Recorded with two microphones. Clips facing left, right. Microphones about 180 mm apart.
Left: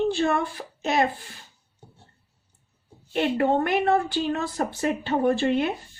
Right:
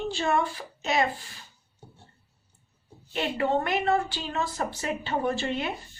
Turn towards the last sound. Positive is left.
turn(degrees=55)  # may be behind; listen again after turning